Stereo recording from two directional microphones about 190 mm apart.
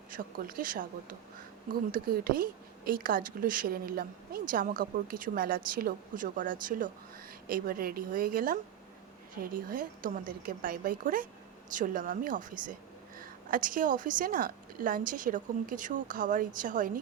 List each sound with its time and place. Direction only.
0.1 s a woman's voice: 50° right (ahead or behind)
1.9 s a woman's voice: 50° right (ahead or behind)